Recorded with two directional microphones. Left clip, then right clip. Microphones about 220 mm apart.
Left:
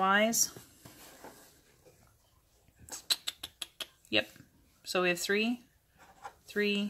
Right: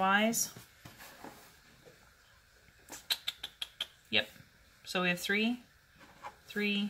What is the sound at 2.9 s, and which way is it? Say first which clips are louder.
Rodents: left 2 dB; 35° left (ahead or behind).